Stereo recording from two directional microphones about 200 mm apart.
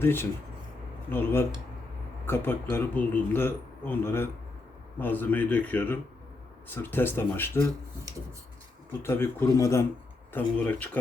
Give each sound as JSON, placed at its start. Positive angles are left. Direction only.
{"t": 0.0, "sound": "a man's voice", "side_deg": 10}
{"t": 8.9, "sound": "a man's voice", "side_deg": 10}